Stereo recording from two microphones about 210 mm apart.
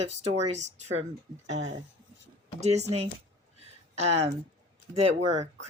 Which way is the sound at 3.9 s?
30° right (ahead or behind).